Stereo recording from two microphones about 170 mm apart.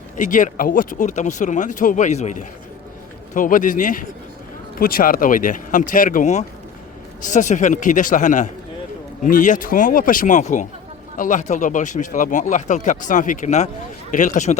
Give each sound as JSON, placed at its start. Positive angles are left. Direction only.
{"t": 0.2, "sound": "speech", "side_deg": 50}